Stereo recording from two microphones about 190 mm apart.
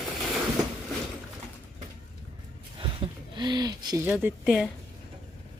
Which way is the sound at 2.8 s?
25° right (ahead or behind).